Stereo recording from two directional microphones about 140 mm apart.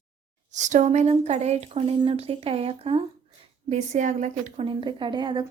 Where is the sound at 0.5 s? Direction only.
60° right (ahead or behind); by 3.0 s 45° right (ahead or behind).